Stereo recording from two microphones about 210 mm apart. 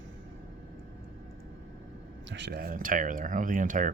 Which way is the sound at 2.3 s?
55° right (ahead or behind).